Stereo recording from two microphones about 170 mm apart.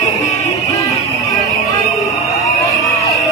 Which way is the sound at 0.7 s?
20° left (ahead or behind).